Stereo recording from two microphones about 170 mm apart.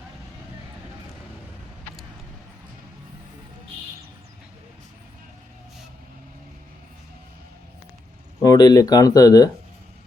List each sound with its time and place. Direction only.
8.4 s speech: 20° left (ahead or behind)